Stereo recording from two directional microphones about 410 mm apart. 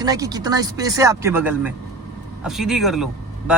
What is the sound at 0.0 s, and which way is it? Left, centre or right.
Speech, centre.